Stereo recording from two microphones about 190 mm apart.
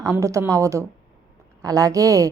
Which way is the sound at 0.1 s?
15° right (ahead or behind).